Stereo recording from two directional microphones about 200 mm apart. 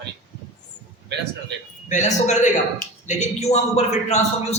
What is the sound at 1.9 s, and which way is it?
A man's voice, 35° left (ahead or behind).